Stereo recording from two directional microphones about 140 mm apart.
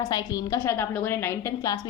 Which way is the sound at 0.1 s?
25° left (ahead or behind).